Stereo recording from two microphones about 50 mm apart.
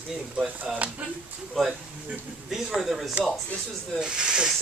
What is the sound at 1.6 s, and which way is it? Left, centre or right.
Speech, centre.